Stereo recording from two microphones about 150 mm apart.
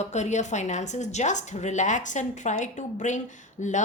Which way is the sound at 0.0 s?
50° left (ahead or behind).